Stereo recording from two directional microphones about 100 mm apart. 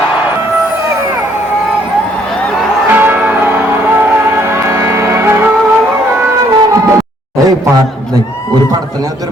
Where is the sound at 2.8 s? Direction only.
20° right (ahead or behind).